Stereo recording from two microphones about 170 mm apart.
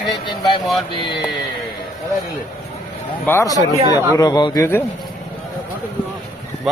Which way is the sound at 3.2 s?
15° left (ahead or behind).